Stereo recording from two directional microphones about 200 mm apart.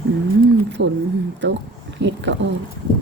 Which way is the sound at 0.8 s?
65° right (ahead or behind).